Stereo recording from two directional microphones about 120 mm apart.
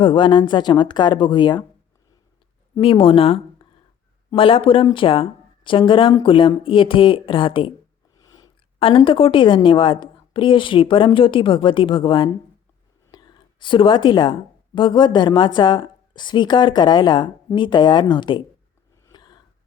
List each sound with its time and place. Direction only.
0.0 s a woman's voice: 45° left (ahead or behind)
2.8 s speech: 50° left (ahead or behind)
8.2 s a sound: 30° left (ahead or behind)
8.8 s speech: 45° left (ahead or behind)
13.1 s whispering: 35° left (ahead or behind)
14.8 s a woman's voice: 40° left (ahead or behind)
19.1 s a sound: 40° left (ahead or behind)